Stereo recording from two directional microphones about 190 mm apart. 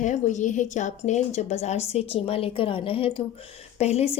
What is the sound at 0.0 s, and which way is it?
Speech, 40° left (ahead or behind).